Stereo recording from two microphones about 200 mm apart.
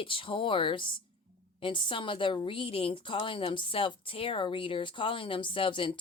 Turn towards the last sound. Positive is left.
turn(degrees=25)  # may be behind; listen again after turning